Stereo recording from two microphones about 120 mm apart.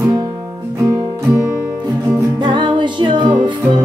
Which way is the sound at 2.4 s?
40° right (ahead or behind).